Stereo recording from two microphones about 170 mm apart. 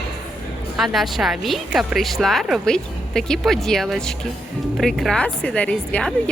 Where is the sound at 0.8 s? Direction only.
Centre (ahead or behind).